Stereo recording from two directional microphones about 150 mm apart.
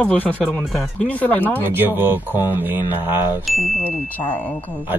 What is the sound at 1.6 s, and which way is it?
Speech, 15° right (ahead or behind).